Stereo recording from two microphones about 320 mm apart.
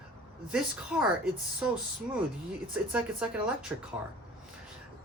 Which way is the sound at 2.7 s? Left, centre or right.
Centre.